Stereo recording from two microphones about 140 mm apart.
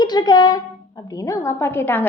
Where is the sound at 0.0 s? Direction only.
30° left (ahead or behind).